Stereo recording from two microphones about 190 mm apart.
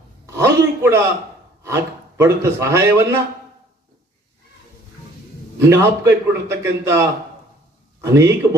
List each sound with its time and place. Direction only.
0.3 s a sound: 15° right (ahead or behind)
1.6 s a man's voice: 15° right (ahead or behind)
5.5 s a man's voice: 15° right (ahead or behind)